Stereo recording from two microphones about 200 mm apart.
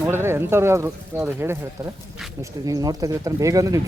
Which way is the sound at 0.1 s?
10° right (ahead or behind).